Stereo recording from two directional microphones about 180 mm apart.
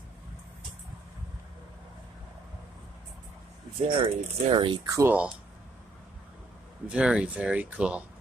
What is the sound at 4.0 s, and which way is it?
Speech, 30° right (ahead or behind).